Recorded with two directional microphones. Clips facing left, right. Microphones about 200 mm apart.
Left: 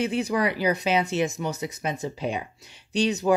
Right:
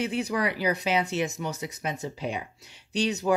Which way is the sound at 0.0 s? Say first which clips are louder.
Left 3 dB; 25° left (ahead or behind).